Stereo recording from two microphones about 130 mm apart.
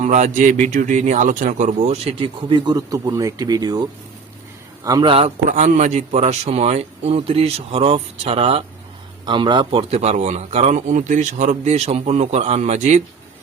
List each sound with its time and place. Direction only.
0.0 s a man's voice: 65° right (ahead or behind); by 5.0 s 25° right (ahead or behind)
5.0 s speech: 45° right (ahead or behind)
5.5 s speech: 70° right (ahead or behind); by 8.6 s 50° right (ahead or behind)
9.2 s speech: 40° right (ahead or behind)
9.9 s a man's voice: 60° right (ahead or behind)